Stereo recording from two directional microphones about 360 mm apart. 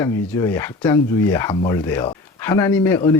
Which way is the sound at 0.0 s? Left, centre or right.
Centre.